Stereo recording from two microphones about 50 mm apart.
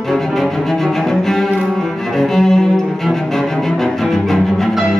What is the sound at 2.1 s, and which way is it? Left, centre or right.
Cello, centre.